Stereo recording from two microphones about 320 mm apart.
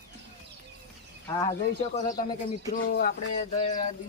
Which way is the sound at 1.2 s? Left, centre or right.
Centre.